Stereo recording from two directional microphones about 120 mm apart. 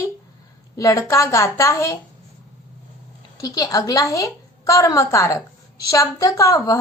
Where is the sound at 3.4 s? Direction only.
30° left (ahead or behind).